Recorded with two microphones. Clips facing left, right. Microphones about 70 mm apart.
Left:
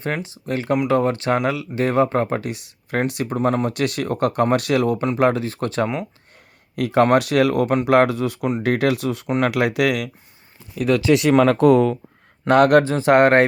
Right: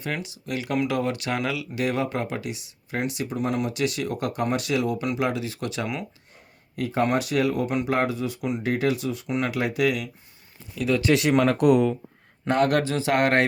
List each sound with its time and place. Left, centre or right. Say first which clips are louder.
0.0 s speech: left 5 dB; left
3.7 s speech: left 4 dB; left
6.7 s speech: left 8 dB; left
12.5 s speech: left 8 dB; left
12.8 s speech: left 8 dB; left